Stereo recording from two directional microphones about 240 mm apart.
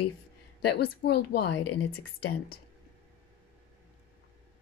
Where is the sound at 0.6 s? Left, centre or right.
Left.